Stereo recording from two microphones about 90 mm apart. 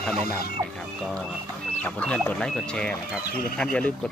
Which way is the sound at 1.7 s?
15° left (ahead or behind).